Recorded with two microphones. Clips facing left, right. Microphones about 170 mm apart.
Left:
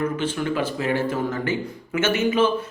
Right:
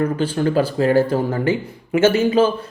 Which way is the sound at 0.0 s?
35° right (ahead or behind).